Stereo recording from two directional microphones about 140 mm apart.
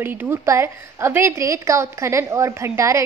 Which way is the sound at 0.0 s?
15° right (ahead or behind).